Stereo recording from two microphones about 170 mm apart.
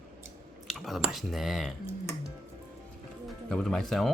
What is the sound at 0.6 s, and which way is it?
Speech, centre (ahead or behind).